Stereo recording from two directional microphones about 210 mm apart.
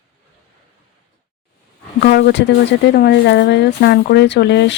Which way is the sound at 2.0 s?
50° left (ahead or behind).